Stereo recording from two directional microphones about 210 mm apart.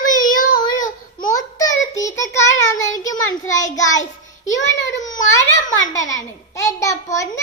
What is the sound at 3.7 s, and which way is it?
Child singing, 15° left (ahead or behind).